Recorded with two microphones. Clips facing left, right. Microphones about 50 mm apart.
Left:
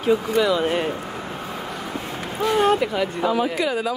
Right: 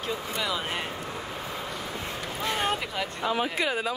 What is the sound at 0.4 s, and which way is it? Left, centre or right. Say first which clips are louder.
Speech: left 10 dB; centre.